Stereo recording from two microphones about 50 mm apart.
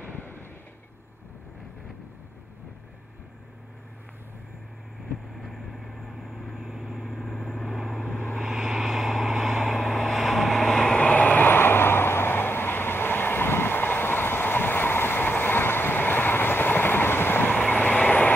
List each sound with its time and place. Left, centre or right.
0.0 s vehicle: left
5.4 s vehicle: centre
11.0 s vehicle: left
11.4 s vehicle: left
17.5 s vehicle: left